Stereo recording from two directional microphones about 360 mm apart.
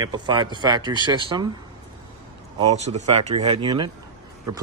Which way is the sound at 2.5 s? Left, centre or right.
Centre.